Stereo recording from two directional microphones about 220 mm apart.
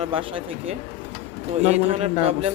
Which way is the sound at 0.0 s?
25° right (ahead or behind).